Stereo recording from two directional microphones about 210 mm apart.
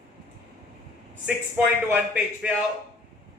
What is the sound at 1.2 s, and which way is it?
Speech, 5° right (ahead or behind).